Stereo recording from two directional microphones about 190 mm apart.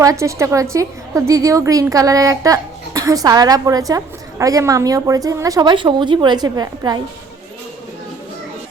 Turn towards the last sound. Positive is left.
turn(degrees=-20)  # may be behind; listen again after turning